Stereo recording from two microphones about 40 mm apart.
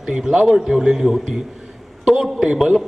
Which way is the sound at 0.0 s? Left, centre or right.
Centre.